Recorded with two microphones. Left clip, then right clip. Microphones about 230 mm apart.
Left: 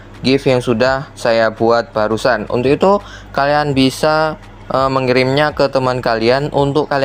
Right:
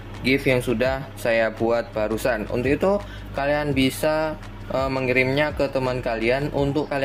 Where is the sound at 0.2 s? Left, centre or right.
Left.